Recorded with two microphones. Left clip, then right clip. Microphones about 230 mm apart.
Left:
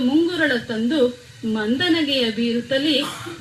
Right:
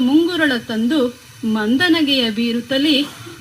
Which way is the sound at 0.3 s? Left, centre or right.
Right.